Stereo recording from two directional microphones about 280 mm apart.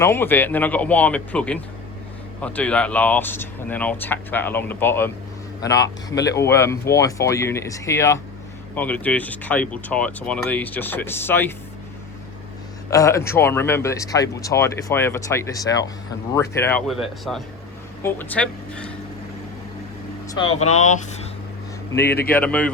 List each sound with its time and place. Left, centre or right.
0.0 s speech: centre
12.9 s speech: centre
20.2 s speech: centre
22.3 s speech: centre